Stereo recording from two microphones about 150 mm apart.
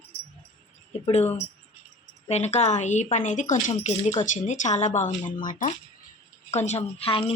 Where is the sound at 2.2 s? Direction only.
45° left (ahead or behind); by 5.7 s 60° left (ahead or behind).